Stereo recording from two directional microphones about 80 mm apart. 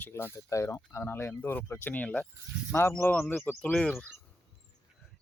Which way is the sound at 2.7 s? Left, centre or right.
Left.